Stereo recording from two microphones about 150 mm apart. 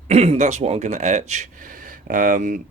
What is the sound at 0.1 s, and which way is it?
Speech, 45° right (ahead or behind).